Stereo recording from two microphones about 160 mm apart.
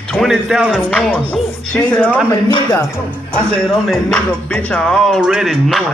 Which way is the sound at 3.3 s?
5° left (ahead or behind).